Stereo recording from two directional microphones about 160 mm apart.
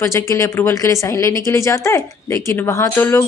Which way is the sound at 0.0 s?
15° left (ahead or behind).